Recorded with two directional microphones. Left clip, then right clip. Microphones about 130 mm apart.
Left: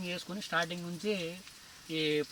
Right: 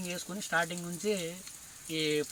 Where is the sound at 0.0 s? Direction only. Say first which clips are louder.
Even; 5° left (ahead or behind).